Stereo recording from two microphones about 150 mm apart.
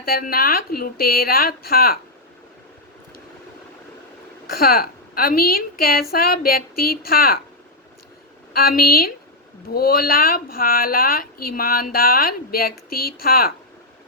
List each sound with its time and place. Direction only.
0.0 s speech: 90° left
4.5 s speech: 85° left
8.5 s speech: 85° left